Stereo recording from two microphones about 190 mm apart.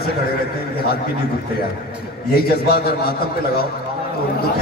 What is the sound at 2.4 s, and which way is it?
Speech, 55° left (ahead or behind).